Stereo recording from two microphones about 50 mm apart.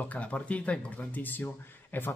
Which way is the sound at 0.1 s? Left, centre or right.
Left.